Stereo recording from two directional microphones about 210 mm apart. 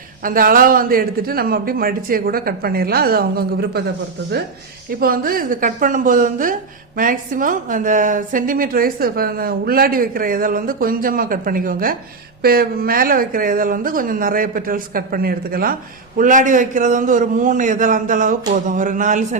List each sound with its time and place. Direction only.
0.2 s a man's voice: 40° right (ahead or behind)
4.9 s a woman's voice: 45° right (ahead or behind)